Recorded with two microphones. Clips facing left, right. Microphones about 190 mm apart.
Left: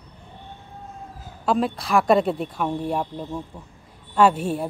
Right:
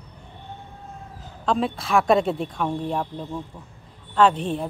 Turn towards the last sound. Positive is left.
turn(degrees=10)  # may be behind; listen again after turning